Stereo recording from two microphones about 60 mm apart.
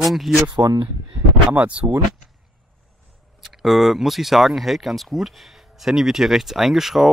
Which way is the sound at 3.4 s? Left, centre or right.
Centre.